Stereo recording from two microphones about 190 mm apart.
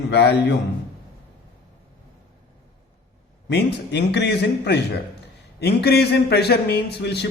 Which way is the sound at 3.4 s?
65° left (ahead or behind).